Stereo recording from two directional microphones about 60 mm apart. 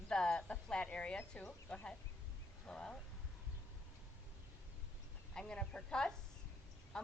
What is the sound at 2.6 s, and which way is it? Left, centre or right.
Speech, centre.